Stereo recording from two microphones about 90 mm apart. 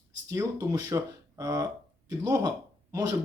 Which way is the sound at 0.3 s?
35° right (ahead or behind).